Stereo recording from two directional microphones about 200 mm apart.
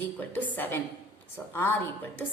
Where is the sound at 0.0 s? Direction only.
10° left (ahead or behind).